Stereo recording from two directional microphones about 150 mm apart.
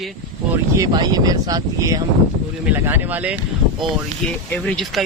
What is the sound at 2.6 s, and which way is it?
Speech, 15° right (ahead or behind).